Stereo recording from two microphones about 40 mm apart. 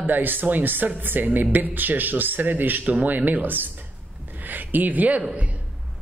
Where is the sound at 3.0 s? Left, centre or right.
Right.